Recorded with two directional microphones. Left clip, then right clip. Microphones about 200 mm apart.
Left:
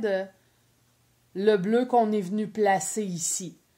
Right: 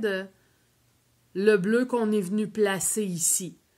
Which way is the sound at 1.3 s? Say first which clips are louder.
Right 1 dB; 45° right (ahead or behind).